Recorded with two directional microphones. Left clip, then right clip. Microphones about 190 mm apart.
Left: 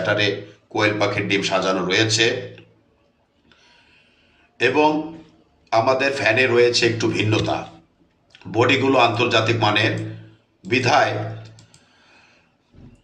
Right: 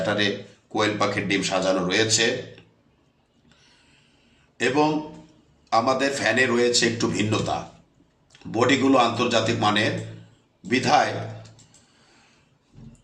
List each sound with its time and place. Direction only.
0.0 s a man's voice: 30° right (ahead or behind)
4.5 s a man's voice: 30° right (ahead or behind)